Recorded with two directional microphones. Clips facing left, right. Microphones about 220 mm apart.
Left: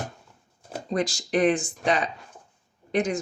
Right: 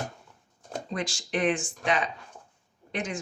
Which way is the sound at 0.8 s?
40° left (ahead or behind).